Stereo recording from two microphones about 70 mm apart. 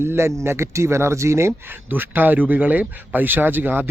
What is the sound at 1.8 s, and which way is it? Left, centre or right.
Speech, right.